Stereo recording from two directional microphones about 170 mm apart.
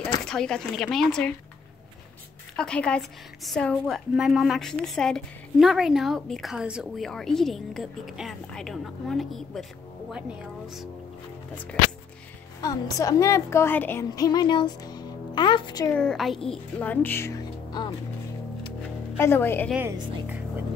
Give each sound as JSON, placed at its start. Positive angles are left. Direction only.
{"t": 0.0, "sound": "speech", "side_deg": 5}
{"t": 2.5, "sound": "a woman's voice", "side_deg": 5}
{"t": 12.6, "sound": "a woman's voice", "side_deg": 20}
{"t": 15.9, "sound": "a child's voice", "side_deg": 5}
{"t": 19.1, "sound": "a child's voice", "side_deg": 15}
{"t": 19.7, "sound": "speech", "side_deg": -10}